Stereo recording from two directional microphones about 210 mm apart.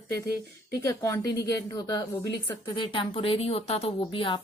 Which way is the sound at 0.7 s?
15° left (ahead or behind).